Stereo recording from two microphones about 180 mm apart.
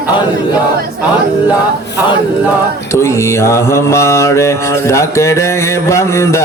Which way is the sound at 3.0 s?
15° left (ahead or behind).